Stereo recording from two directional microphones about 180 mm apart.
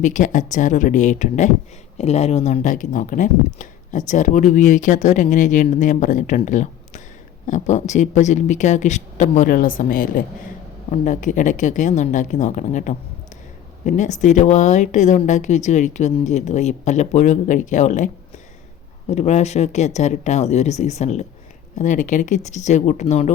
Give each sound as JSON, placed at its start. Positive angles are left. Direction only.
{"t": 0.0, "sound": "speech", "side_deg": 45}